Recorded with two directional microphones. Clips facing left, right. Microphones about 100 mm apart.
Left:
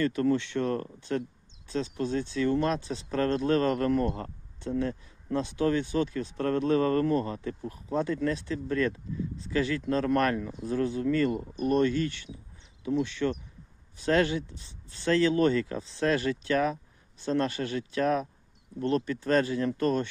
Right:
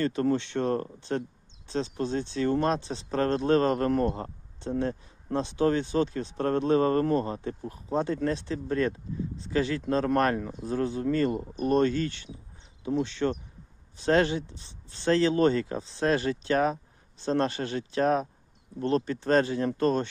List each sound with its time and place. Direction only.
0.0 s speech: 30° right (ahead or behind)